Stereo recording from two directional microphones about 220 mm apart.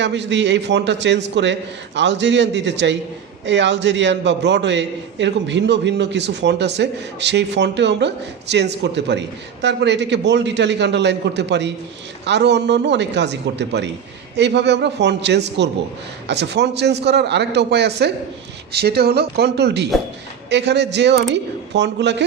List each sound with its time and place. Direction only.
0.0 s a man's voice: 55° right (ahead or behind)